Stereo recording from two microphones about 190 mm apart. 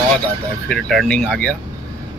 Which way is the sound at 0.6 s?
Centre (ahead or behind).